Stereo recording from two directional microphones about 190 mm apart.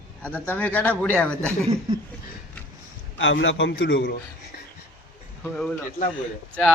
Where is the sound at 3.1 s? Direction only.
80° left.